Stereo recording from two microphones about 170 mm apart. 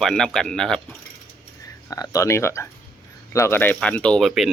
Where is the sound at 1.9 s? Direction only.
20° left (ahead or behind); by 4.5 s centre (ahead or behind).